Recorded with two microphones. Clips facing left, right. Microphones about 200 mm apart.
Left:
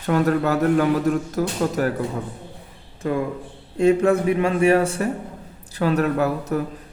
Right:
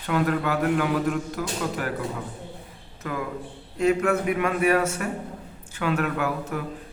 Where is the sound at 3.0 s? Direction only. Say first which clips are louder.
Left 7 dB; 30° left (ahead or behind).